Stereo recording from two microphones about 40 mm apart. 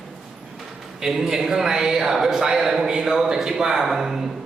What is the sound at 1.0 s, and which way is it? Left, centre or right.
A man's voice, centre.